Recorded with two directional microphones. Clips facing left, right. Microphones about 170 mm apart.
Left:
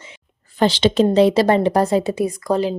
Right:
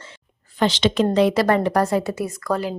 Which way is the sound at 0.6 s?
30° left (ahead or behind).